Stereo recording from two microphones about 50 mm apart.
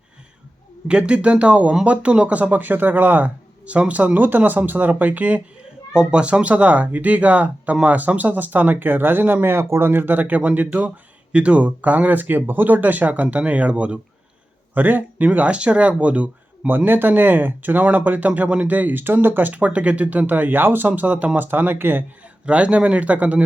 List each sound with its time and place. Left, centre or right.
0.9 s speech: centre
5.9 s speech: centre
14.8 s speech: right
16.6 s speech: right
22.4 s speech: right